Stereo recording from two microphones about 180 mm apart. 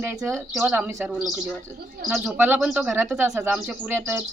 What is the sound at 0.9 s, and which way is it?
Speech, 15° right (ahead or behind).